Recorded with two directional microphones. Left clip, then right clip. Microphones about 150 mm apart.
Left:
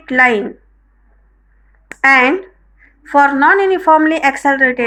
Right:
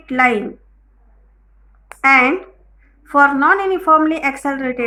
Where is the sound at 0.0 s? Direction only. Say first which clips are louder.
Left 4 dB; 25° left (ahead or behind).